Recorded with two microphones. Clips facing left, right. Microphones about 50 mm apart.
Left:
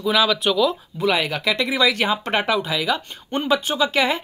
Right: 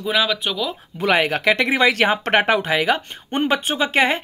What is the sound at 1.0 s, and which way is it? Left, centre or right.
Speech, right.